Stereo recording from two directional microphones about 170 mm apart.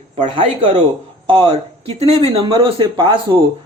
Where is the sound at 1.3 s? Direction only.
30° right (ahead or behind).